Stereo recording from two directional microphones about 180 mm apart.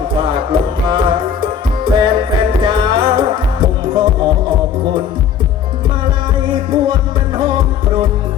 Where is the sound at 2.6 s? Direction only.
25° right (ahead or behind).